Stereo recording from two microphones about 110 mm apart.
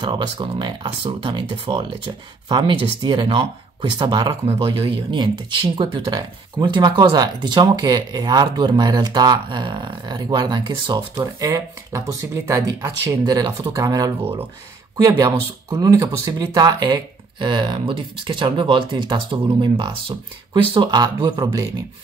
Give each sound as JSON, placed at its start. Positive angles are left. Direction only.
{"t": 0.0, "sound": "speech", "side_deg": -45}
{"t": 11.1, "sound": "speech", "side_deg": -30}
{"t": 13.2, "sound": "speech", "side_deg": -40}